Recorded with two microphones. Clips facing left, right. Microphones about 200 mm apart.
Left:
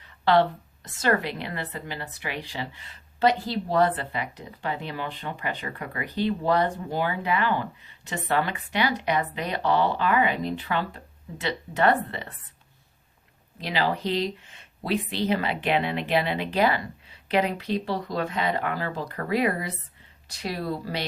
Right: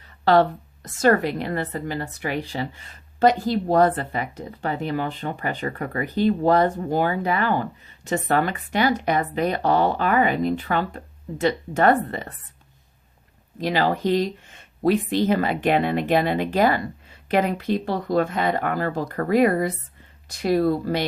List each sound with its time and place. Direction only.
0.9 s a woman's voice: 45° right (ahead or behind)
13.6 s a woman's voice: 45° right (ahead or behind)